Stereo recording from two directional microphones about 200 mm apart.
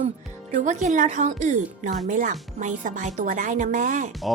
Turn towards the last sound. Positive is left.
turn(degrees=-40)  # may be behind; listen again after turning